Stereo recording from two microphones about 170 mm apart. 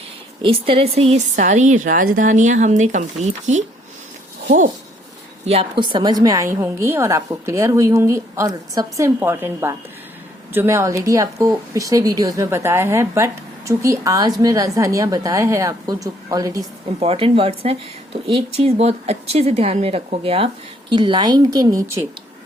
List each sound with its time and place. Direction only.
0.4 s speech: 30° right (ahead or behind); by 4.7 s 45° right (ahead or behind)
5.5 s a woman's voice: 30° right (ahead or behind)
17.0 s a woman's voice: 35° right (ahead or behind); by 22.0 s 15° right (ahead or behind)